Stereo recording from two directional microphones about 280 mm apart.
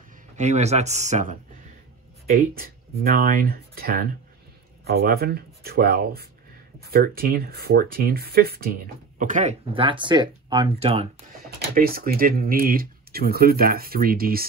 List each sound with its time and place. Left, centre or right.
0.4 s speech: right